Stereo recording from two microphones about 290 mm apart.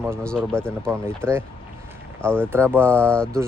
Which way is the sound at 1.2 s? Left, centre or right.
Centre.